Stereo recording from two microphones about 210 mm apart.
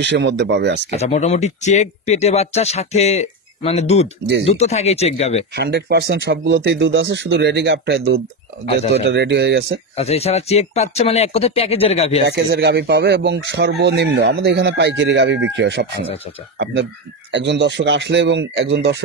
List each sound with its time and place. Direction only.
0.0 s speech: 60° right (ahead or behind)
0.8 s speech: 30° left (ahead or behind)
5.6 s speech: 55° right (ahead or behind)
9.9 s speech: 30° left (ahead or behind)
12.3 s speech: 50° right (ahead or behind)
17.3 s speech: 55° right (ahead or behind)